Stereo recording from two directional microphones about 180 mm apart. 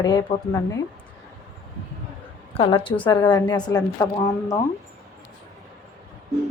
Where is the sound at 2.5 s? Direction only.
30° left (ahead or behind).